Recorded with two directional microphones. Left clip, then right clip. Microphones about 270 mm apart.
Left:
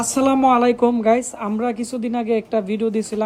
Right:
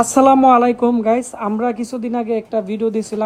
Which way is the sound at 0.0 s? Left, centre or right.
Centre.